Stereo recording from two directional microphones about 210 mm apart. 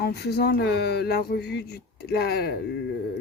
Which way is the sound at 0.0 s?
50° left (ahead or behind).